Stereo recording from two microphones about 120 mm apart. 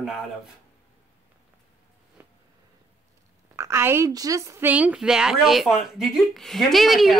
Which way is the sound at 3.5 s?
20° right (ahead or behind).